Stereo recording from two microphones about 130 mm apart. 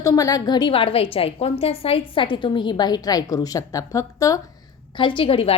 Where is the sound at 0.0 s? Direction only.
25° left (ahead or behind).